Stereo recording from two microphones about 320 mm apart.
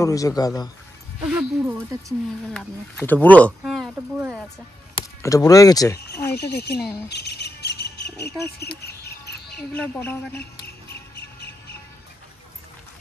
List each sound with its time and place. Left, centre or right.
0.0 s speech: centre
1.2 s speech: centre
2.5 s speech: centre
4.9 s speech: centre
6.0 s speech: left
7.1 s cricket: left
8.5 s a sound: left
9.8 s speech: centre
11.1 s bird: left